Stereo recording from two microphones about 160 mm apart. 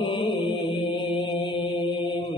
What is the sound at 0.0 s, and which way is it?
Mantra, 30° left (ahead or behind).